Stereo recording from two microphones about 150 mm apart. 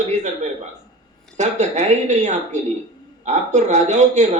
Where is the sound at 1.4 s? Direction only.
50° right (ahead or behind).